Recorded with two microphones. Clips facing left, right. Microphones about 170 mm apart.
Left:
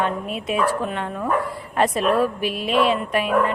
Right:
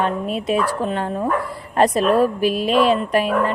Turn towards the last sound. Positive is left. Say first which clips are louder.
# right 2 dB
turn(degrees=-35)  # may be behind; listen again after turning